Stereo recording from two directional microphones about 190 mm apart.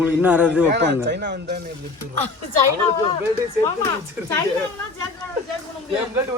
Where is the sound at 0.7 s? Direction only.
65° right (ahead or behind).